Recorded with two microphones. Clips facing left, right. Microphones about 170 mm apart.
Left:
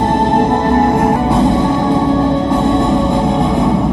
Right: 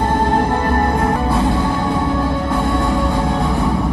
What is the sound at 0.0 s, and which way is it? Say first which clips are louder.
Music: left 4 dB; 20° left (ahead or behind).